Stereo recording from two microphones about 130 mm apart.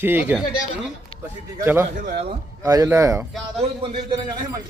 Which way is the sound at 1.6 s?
15° right (ahead or behind).